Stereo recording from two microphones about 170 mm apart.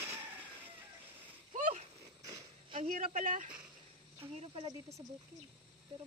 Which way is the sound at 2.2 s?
20° right (ahead or behind).